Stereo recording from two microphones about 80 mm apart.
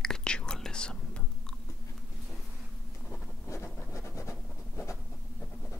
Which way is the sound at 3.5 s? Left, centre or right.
Left.